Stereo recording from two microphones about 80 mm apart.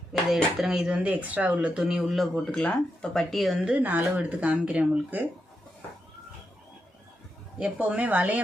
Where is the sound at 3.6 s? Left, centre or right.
Centre.